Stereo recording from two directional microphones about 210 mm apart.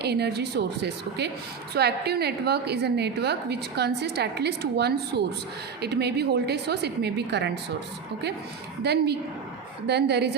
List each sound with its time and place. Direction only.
0.0 s a woman's voice: 50° right (ahead or behind)
8.8 s a woman's voice: 50° right (ahead or behind)